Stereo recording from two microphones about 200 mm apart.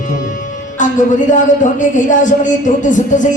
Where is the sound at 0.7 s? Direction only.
40° left (ahead or behind).